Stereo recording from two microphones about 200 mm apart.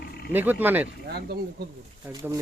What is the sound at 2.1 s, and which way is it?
Speech, 15° right (ahead or behind).